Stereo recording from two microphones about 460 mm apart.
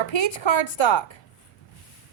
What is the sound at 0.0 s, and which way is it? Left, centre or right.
Speech, left.